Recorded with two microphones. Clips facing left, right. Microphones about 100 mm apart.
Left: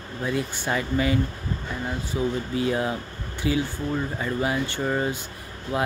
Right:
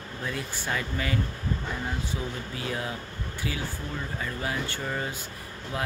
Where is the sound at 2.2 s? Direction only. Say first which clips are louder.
Left 9 dB; 20° left (ahead or behind).